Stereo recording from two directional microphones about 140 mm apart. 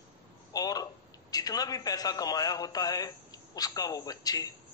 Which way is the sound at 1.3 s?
25° left (ahead or behind).